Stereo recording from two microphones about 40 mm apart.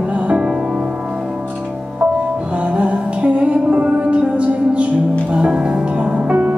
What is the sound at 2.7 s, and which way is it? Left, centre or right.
Music, right.